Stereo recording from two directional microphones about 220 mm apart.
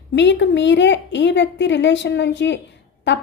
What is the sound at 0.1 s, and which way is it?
A woman's voice, 55° left (ahead or behind).